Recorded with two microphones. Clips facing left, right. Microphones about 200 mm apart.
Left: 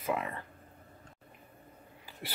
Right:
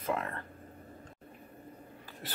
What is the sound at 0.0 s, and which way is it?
Speech, 10° left (ahead or behind).